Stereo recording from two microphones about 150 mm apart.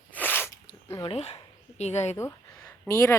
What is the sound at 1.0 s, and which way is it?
Speech, 40° left (ahead or behind).